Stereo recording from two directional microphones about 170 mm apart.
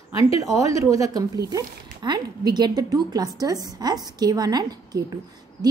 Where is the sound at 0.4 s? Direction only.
20° right (ahead or behind).